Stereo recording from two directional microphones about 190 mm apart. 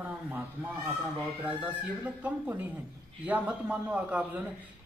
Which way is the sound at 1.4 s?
10° right (ahead or behind).